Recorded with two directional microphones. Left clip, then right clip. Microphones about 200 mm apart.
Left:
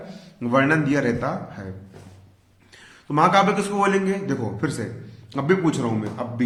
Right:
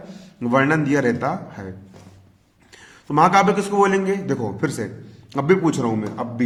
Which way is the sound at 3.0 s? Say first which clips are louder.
Right 2 dB; 35° right (ahead or behind).